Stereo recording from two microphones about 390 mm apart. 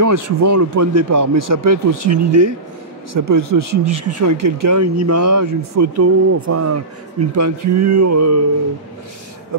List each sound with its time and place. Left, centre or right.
0.0 s speech: right